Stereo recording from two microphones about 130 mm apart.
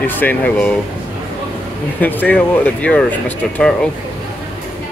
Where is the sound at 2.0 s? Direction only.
15° left (ahead or behind).